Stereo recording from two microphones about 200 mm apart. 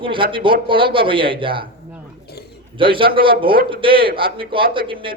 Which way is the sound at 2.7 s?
25° right (ahead or behind).